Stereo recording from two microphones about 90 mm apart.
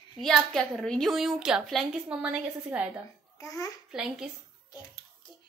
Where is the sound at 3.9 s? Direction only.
5° right (ahead or behind).